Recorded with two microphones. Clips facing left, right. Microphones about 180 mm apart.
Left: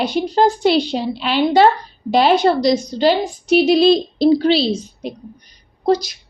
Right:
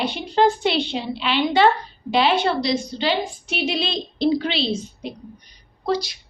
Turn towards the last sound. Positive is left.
turn(degrees=45)  # may be behind; listen again after turning